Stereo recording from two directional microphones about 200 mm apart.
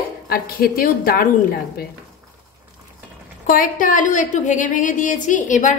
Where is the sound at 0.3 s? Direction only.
50° left (ahead or behind).